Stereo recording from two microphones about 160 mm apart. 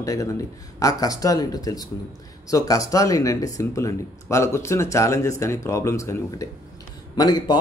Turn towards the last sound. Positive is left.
turn(degrees=25)  # may be behind; listen again after turning